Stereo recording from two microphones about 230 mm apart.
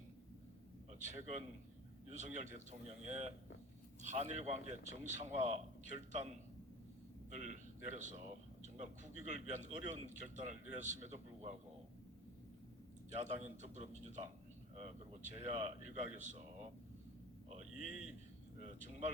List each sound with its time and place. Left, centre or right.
0.9 s a man's voice: right
7.3 s speech: right
13.1 s speech: right
18.6 s speech: right